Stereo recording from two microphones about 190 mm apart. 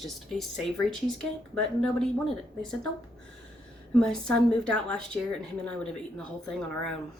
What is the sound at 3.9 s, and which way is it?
A woman's voice, 5° left (ahead or behind).